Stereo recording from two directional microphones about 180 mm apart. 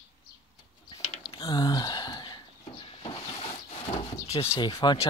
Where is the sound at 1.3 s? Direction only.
25° left (ahead or behind).